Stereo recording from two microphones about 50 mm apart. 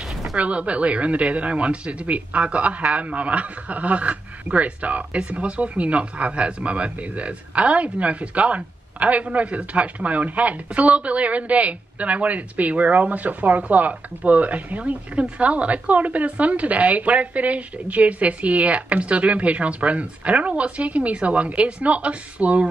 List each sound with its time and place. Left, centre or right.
0.4 s speech: right